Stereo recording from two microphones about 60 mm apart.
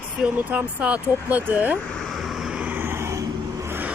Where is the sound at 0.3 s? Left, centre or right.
Right.